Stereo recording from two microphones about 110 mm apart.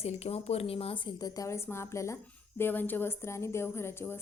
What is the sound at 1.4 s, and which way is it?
A woman's voice, 25° left (ahead or behind).